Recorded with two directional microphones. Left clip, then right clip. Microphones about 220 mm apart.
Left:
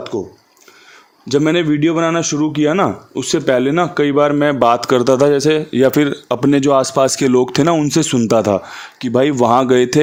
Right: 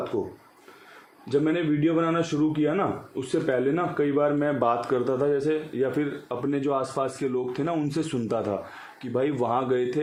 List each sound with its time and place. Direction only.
1.3 s a man's voice: 55° left (ahead or behind)